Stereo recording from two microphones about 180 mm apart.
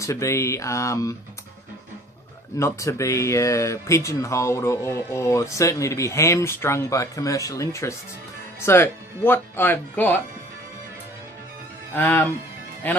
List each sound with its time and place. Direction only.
0.0 s speech: 15° left (ahead or behind)
2.6 s speech: 15° left (ahead or behind)
11.9 s speech: 10° left (ahead or behind)